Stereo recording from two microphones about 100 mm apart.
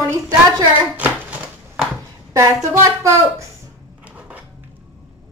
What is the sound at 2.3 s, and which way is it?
Speech, 30° right (ahead or behind).